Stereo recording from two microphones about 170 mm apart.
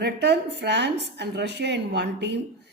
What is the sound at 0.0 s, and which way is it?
A woman's voice, 80° right.